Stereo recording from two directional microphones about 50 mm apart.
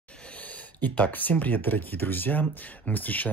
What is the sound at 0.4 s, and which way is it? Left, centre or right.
Speech, left.